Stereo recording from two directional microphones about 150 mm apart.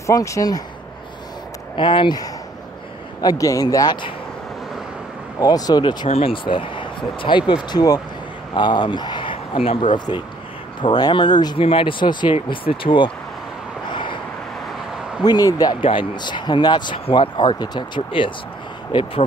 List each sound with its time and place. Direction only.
0.0 s speech: 20° left (ahead or behind)
1.8 s speech: 35° left (ahead or behind)
5.4 s speech: 25° left (ahead or behind)
6.0 s speech: 40° left (ahead or behind)
13.8 s vehicle: 35° left (ahead or behind)
15.2 s speech: 25° left (ahead or behind)